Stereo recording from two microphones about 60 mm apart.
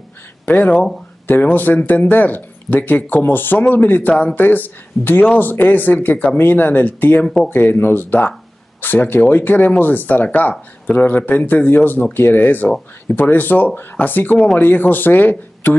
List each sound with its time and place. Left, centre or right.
0.5 s speech: left